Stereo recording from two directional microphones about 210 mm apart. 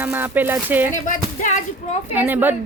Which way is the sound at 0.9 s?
35° left (ahead or behind).